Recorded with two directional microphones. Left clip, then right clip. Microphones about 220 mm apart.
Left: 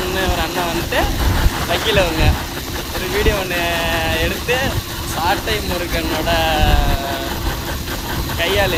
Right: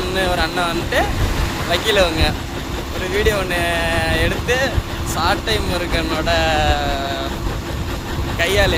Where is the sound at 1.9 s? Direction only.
20° right (ahead or behind).